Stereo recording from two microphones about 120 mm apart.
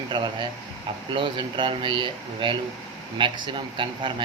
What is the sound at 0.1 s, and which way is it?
A man's voice, 40° right (ahead or behind).